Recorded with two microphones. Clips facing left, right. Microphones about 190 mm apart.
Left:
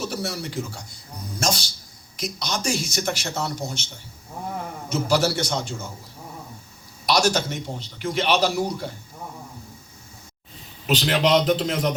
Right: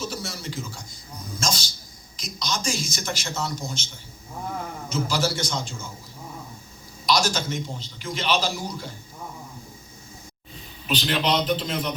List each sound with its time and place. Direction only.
0.0 s a man's voice: 65° left (ahead or behind)
4.9 s a man's voice: 65° left (ahead or behind)
7.0 s a man's voice: 65° left (ahead or behind)
10.8 s a man's voice: 90° left